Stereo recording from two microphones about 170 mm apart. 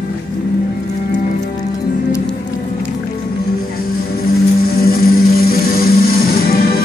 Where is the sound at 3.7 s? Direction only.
65° left (ahead or behind).